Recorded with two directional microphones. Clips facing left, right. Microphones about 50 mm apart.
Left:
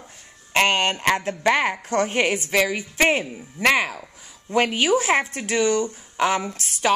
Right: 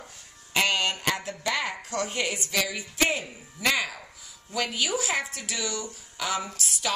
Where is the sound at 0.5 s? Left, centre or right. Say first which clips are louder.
Left 6 dB; left.